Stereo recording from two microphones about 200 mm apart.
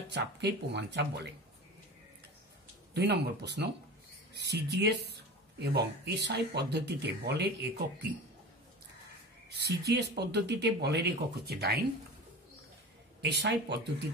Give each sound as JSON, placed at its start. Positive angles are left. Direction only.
{"t": 0.1, "sound": "speech", "side_deg": -55}
{"t": 2.9, "sound": "speech", "side_deg": -55}
{"t": 9.7, "sound": "speech", "side_deg": -55}
{"t": 13.2, "sound": "speech", "side_deg": -55}